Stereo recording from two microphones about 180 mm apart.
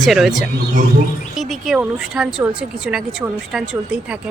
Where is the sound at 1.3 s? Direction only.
Centre (ahead or behind).